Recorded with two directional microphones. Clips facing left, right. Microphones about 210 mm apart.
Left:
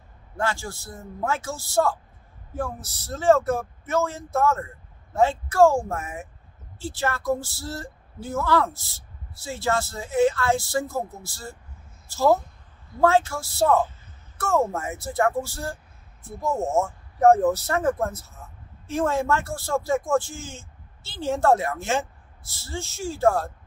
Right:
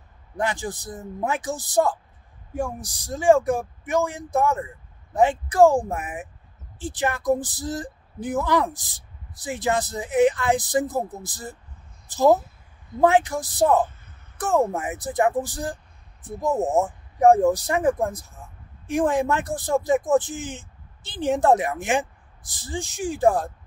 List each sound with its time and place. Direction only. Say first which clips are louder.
0.4 s speech: right 2 dB; 15° right (ahead or behind)